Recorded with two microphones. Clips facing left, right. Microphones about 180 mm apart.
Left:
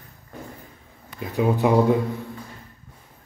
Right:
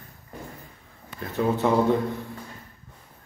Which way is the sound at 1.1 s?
15° left (ahead or behind).